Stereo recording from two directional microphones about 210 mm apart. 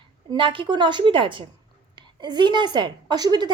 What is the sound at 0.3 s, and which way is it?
Speech, 25° right (ahead or behind).